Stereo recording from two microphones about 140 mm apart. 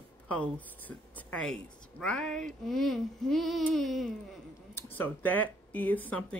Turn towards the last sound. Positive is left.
turn(degrees=10)  # may be behind; listen again after turning